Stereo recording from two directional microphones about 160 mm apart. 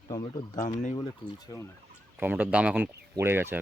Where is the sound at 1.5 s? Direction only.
20° left (ahead or behind).